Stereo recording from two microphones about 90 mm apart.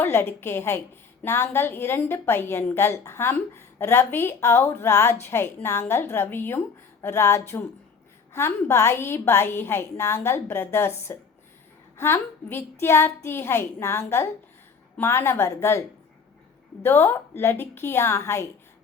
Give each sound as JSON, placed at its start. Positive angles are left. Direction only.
{"t": 0.0, "sound": "a woman's voice", "side_deg": 25}
{"t": 16.8, "sound": "a woman's voice", "side_deg": 25}